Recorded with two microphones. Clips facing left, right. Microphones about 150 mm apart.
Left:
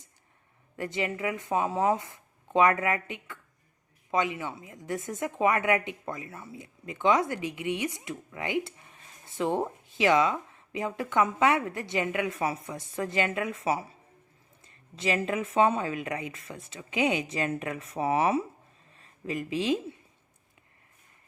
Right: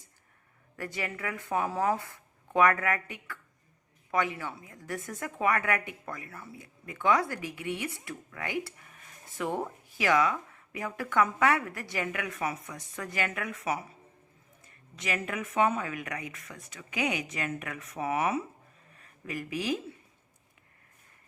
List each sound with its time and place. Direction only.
0.8 s a woman's voice: 20° left (ahead or behind)